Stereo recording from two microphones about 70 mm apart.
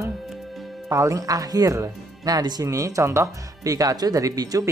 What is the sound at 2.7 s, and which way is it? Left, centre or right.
Speech, right.